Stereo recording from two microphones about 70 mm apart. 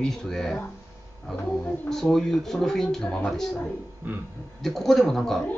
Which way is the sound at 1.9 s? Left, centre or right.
Centre.